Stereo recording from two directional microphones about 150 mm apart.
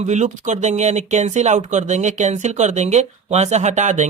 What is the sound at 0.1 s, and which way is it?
Speech, 50° right (ahead or behind).